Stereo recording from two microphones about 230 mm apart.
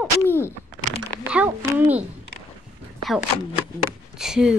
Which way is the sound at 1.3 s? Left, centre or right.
Centre.